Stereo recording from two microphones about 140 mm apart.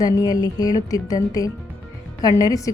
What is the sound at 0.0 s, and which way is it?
A woman's voice, 25° left (ahead or behind).